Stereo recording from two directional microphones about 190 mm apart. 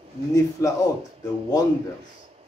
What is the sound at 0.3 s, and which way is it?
Speech, 15° left (ahead or behind).